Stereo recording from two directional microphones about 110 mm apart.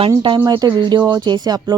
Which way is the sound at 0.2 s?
50° right (ahead or behind).